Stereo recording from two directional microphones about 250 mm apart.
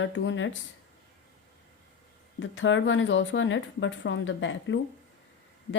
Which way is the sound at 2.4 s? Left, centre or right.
Left.